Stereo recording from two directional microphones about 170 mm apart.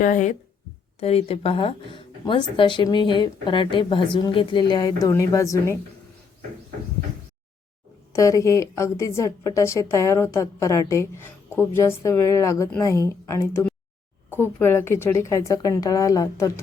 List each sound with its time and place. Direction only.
0.0 s speech: 50° left (ahead or behind)
0.9 s speech: 35° left (ahead or behind); by 5.8 s 15° left (ahead or behind)
8.1 s a woman's voice: 20° left (ahead or behind)